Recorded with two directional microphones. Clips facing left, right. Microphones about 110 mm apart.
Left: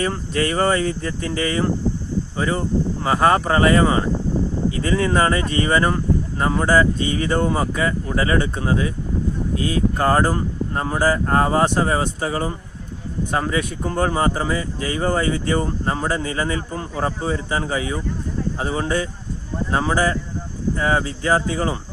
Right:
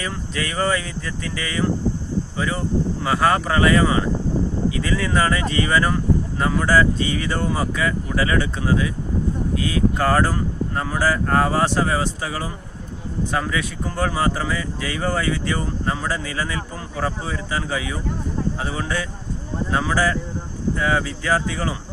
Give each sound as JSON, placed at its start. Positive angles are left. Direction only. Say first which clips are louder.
{"t": 0.0, "sound": "speech", "louder": "left 6 dB", "side_deg": 40}
{"t": 10.0, "sound": "speech", "louder": "left 3 dB", "side_deg": 20}